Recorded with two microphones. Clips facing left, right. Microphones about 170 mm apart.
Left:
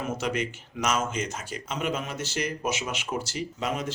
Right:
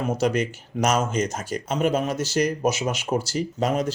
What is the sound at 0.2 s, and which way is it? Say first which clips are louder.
Speech: right 7 dB; 40° right (ahead or behind).